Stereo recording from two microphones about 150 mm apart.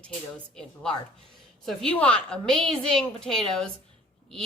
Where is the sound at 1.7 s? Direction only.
5° left (ahead or behind).